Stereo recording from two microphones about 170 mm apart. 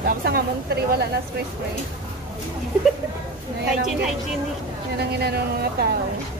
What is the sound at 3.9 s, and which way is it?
Speech, centre (ahead or behind).